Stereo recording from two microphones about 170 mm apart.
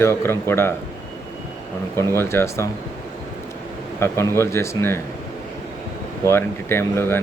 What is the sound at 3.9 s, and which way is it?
A man's voice, 15° left (ahead or behind).